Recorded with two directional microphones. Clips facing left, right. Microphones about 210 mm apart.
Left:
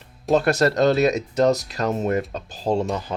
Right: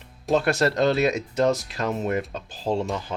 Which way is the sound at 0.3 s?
40° left (ahead or behind).